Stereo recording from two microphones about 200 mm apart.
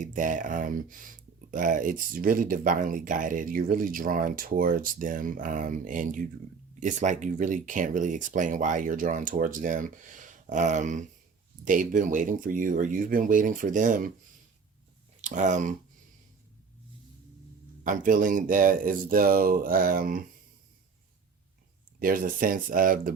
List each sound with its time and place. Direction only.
0.0 s speech: 40° right (ahead or behind)
15.2 s speech: 35° right (ahead or behind)
17.8 s speech: 40° right (ahead or behind)
21.9 s speech: 45° right (ahead or behind)